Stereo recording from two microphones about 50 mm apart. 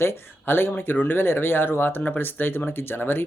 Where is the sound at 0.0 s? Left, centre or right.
Left.